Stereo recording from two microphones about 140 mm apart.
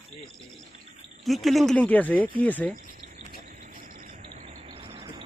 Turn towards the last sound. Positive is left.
turn(degrees=-40)  # may be behind; listen again after turning